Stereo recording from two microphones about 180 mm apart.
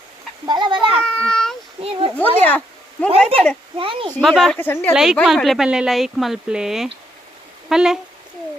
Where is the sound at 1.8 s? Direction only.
30° right (ahead or behind).